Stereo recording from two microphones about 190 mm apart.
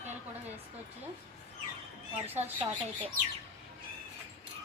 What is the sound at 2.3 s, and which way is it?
Speech, 10° right (ahead or behind).